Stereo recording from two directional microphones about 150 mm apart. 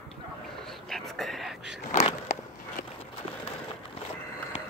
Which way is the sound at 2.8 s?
65° left (ahead or behind).